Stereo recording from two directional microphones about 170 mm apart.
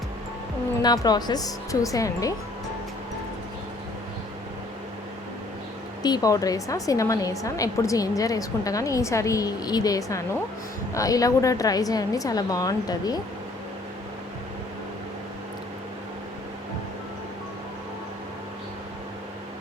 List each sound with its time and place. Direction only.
0.8 s a woman's voice: 25° left (ahead or behind)
6.0 s a woman's voice: 20° left (ahead or behind)